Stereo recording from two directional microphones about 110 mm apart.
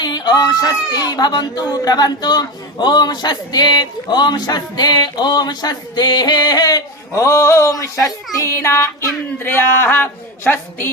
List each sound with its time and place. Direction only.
0.0 s speech: 40° left (ahead or behind)
8.4 s music: 25° left (ahead or behind)